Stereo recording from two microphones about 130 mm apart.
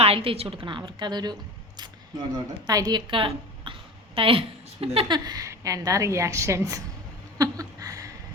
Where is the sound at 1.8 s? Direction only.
35° right (ahead or behind).